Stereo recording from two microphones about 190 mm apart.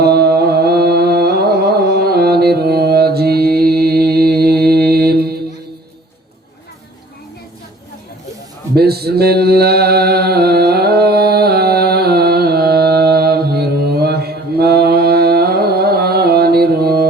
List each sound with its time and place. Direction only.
0.0 s music: 55° right (ahead or behind)
8.7 s mantra: 55° right (ahead or behind)